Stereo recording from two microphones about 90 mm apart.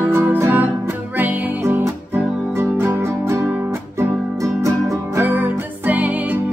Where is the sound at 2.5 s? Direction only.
30° right (ahead or behind).